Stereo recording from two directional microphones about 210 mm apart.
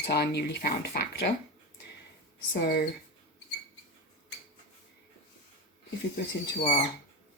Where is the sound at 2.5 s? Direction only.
55° left (ahead or behind).